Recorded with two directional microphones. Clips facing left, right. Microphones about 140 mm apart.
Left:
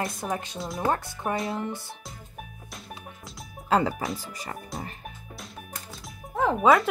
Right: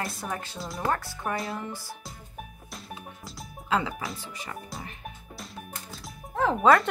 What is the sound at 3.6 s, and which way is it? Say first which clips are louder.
Speech: left 4 dB; 40° left (ahead or behind).